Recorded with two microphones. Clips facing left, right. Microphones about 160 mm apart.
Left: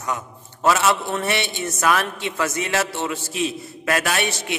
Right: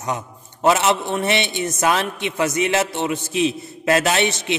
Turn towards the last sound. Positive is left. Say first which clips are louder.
# right 4 dB
turn(degrees=-20)  # may be behind; listen again after turning